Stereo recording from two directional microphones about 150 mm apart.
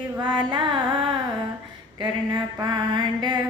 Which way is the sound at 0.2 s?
30° right (ahead or behind).